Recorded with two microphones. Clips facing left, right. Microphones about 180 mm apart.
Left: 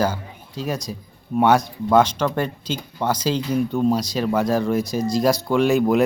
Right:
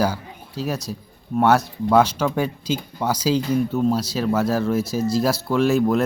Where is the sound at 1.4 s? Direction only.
5° right (ahead or behind).